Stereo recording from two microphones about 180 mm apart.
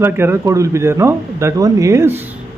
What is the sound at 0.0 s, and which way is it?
Speech, 15° right (ahead or behind).